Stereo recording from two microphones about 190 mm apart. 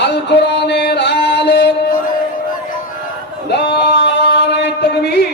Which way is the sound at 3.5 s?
65° left (ahead or behind).